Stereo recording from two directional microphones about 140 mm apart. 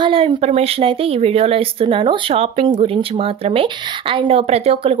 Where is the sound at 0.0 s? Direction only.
35° right (ahead or behind).